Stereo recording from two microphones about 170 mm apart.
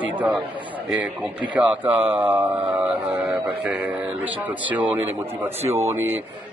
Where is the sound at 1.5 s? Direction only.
10° right (ahead or behind).